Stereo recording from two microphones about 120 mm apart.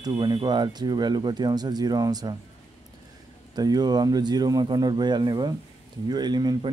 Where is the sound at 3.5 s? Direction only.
35° right (ahead or behind).